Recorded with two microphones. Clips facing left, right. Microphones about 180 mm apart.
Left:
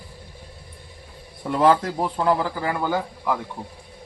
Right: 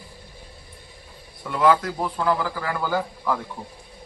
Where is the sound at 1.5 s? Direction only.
35° left (ahead or behind); by 3.4 s 15° left (ahead or behind).